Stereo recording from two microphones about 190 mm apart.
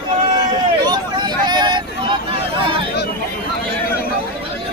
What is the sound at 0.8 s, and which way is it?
Vehicle, 25° right (ahead or behind).